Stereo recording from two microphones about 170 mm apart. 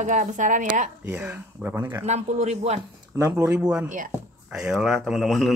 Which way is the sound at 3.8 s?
50° right (ahead or behind).